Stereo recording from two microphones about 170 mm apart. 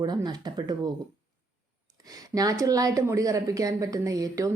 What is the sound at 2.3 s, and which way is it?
A woman's voice, 20° right (ahead or behind).